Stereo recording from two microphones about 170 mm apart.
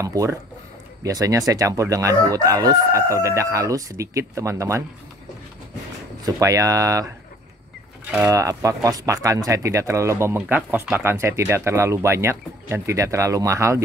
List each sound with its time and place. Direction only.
0.0 s speech: 20° right (ahead or behind)
6.2 s speech: 20° right (ahead or behind)
8.2 s speech: 20° right (ahead or behind)